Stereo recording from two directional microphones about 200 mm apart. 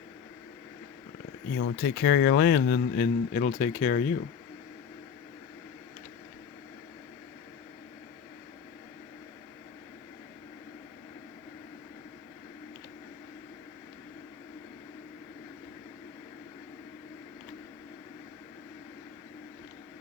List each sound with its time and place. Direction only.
1.5 s a man's voice: 60° left (ahead or behind); by 4.0 s 40° left (ahead or behind)